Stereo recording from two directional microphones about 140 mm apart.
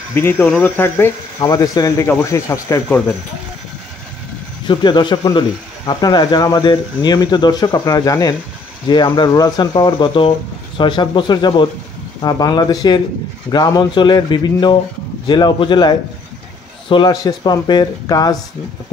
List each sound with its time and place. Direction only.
0.1 s speech: 15° left (ahead or behind)
4.6 s speech: 35° left (ahead or behind)